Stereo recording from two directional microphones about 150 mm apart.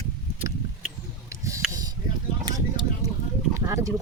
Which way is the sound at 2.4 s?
30° right (ahead or behind).